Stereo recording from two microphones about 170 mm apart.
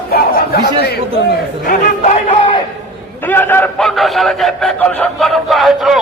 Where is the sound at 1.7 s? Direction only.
50° left (ahead or behind).